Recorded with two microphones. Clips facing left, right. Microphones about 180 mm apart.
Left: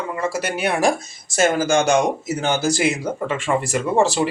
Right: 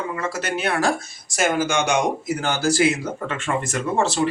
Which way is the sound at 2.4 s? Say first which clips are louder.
Left 3 dB; 20° left (ahead or behind).